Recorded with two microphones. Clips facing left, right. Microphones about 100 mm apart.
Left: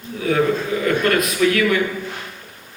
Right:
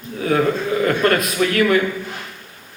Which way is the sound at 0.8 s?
40° right (ahead or behind).